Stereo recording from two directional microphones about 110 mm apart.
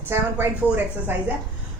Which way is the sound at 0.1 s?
20° right (ahead or behind).